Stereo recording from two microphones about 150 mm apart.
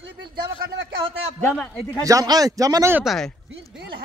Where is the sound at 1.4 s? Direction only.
5° left (ahead or behind).